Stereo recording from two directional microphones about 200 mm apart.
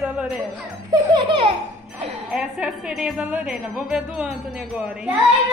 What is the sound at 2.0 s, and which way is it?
Music, 30° right (ahead or behind).